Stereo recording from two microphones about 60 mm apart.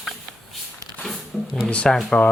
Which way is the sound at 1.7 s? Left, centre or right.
Centre.